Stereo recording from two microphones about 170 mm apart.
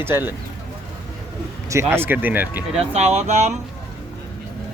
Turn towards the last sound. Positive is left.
turn(degrees=-40)  # may be behind; listen again after turning